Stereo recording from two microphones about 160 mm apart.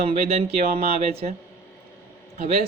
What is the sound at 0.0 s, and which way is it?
Speech, 40° right (ahead or behind).